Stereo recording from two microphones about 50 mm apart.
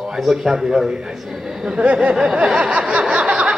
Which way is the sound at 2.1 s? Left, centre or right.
Centre.